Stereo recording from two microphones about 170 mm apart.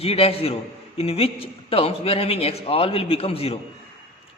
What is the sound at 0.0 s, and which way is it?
A man's voice, 35° left (ahead or behind).